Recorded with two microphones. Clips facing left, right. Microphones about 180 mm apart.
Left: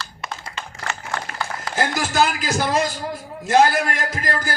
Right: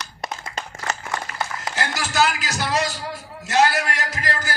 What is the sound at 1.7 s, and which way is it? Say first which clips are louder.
A man's voice: left 6 dB; 50° left (ahead or behind).